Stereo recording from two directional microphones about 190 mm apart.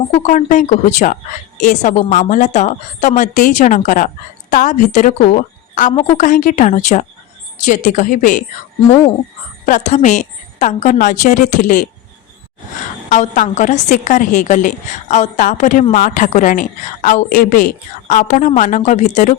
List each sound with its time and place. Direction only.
0.2 s a woman's voice: 40° left (ahead or behind)
9.6 s a woman's voice: 40° left (ahead or behind)
13.1 s a woman's voice: 40° left (ahead or behind)